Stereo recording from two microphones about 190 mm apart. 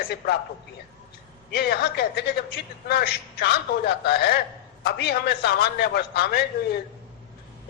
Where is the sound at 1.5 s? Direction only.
55° left (ahead or behind).